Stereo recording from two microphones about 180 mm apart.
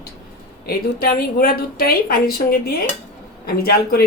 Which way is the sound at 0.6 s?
60° left (ahead or behind).